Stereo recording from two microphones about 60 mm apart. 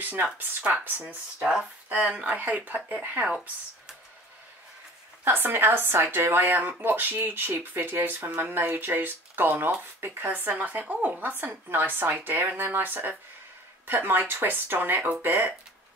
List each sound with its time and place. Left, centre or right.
0.0 s speech: right
5.2 s speech: right